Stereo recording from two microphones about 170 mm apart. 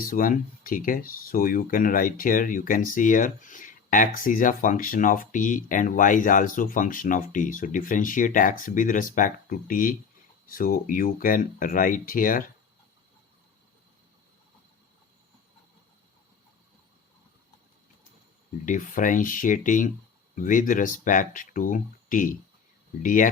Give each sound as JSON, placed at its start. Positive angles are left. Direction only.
{"t": 0.1, "sound": "speech", "side_deg": 55}
{"t": 18.6, "sound": "speech", "side_deg": 50}